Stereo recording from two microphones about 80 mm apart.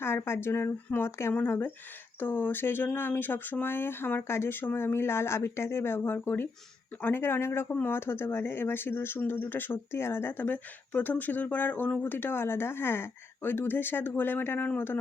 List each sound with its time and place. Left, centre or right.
0.0 s a woman's voice: left
7.7 s speech: centre
7.9 s speech: left